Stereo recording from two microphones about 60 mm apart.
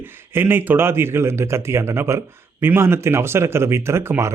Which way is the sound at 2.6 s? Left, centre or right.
Right.